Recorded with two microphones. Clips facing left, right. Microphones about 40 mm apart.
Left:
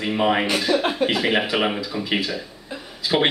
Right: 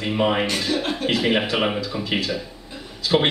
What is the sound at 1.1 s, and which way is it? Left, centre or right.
A man's voice, centre.